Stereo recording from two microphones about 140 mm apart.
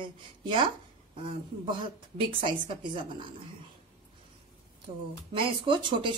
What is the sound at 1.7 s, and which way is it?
A woman's voice, 35° right (ahead or behind).